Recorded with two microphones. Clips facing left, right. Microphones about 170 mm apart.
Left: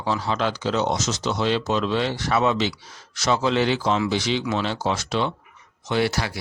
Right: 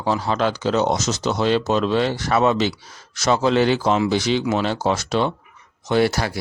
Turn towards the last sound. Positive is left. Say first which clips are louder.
# right 4 dB
turn(degrees=-45)  # may be behind; listen again after turning